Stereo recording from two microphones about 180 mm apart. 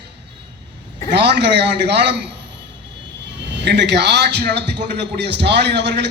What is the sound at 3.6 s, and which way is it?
A man's voice, 70° right (ahead or behind).